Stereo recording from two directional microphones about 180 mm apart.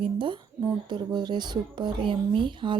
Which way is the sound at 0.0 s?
25° right (ahead or behind).